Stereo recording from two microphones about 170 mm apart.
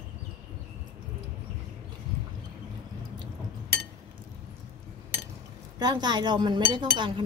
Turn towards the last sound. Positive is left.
turn(degrees=-30)  # may be behind; listen again after turning